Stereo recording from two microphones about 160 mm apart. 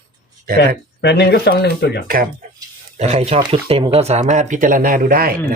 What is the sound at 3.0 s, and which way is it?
Speech, 45° right (ahead or behind).